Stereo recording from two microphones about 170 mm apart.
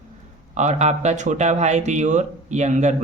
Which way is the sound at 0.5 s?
40° right (ahead or behind).